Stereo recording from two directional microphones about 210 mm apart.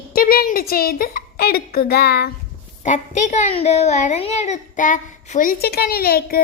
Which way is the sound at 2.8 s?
35° left (ahead or behind).